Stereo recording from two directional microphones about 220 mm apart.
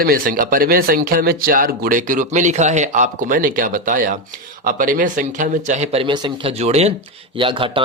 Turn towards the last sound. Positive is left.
turn(degrees=-25)  # may be behind; listen again after turning